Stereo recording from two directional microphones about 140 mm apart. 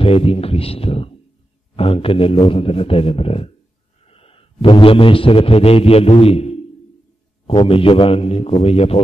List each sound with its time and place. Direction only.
0.0 s a man's voice: 45° left (ahead or behind)